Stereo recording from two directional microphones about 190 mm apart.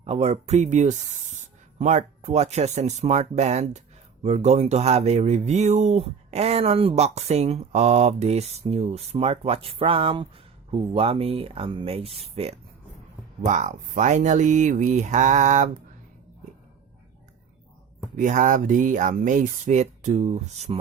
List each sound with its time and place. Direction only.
0.0 s speech: 35° right (ahead or behind)
18.2 s speech: 40° right (ahead or behind)